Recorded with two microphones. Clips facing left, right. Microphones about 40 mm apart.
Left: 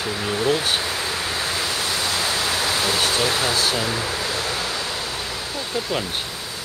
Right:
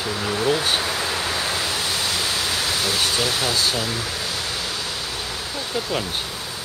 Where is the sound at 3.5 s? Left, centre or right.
Centre.